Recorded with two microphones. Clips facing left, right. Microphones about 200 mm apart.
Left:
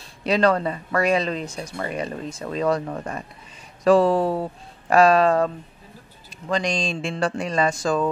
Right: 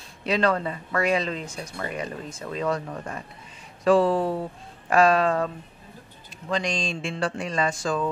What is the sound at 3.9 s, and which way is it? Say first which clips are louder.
Speech: left 3 dB; 40° left (ahead or behind).